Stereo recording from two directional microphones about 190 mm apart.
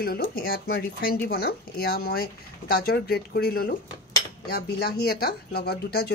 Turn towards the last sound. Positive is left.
turn(degrees=55)  # may be behind; listen again after turning